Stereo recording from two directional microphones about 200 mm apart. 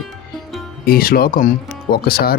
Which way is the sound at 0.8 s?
50° left (ahead or behind).